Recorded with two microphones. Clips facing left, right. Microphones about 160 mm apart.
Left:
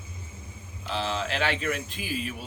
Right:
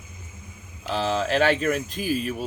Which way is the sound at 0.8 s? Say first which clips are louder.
Right 5 dB; 45° right (ahead or behind).